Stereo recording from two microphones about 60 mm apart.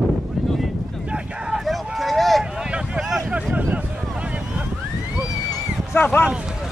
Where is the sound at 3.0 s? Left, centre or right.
Centre.